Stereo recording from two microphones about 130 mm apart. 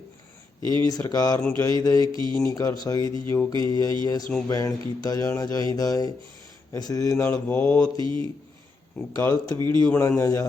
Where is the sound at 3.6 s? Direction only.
35° right (ahead or behind).